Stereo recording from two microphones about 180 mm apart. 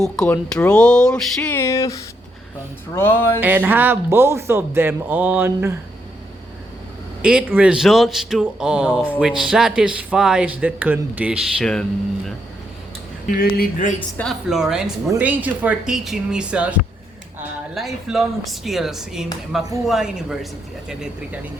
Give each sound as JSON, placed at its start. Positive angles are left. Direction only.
{"t": 0.0, "sound": "speech", "side_deg": 5}
{"t": 2.9, "sound": "music", "side_deg": 10}
{"t": 3.4, "sound": "speech", "side_deg": -10}
{"t": 7.2, "sound": "speech", "side_deg": -5}
{"t": 11.6, "sound": "speech", "side_deg": 5}
{"t": 13.4, "sound": "speech", "side_deg": 50}
{"t": 14.2, "sound": "speech", "side_deg": 0}